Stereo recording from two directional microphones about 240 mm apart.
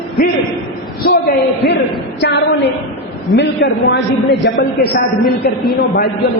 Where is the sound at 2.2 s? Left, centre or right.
Left.